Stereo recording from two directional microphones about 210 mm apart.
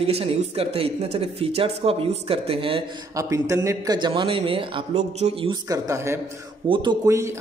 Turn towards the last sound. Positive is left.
turn(degrees=-15)  # may be behind; listen again after turning